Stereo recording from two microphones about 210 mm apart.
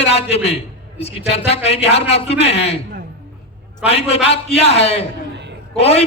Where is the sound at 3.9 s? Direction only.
30° left (ahead or behind).